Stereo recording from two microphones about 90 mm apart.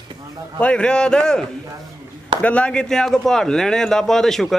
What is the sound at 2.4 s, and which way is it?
A man's voice, 15° left (ahead or behind).